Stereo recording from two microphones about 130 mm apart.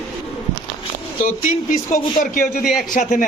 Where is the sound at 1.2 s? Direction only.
90° left.